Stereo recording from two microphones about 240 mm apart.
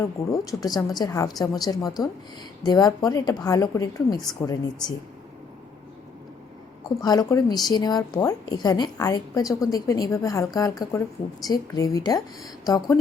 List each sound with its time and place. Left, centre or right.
0.0 s a woman's voice: centre
7.0 s a woman's voice: centre